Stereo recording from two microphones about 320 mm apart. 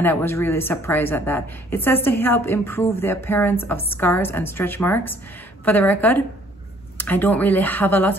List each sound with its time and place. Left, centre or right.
0.0 s a woman's voice: centre